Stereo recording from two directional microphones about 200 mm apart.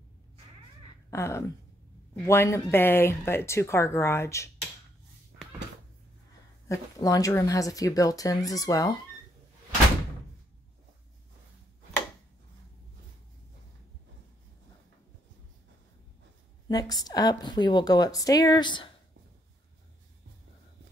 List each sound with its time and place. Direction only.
1.1 s speech: 15° left (ahead or behind)
6.7 s speech: 15° left (ahead or behind)
16.6 s a woman's voice: 20° left (ahead or behind)